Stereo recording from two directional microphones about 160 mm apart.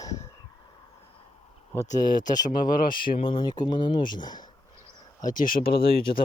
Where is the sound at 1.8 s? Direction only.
50° left (ahead or behind).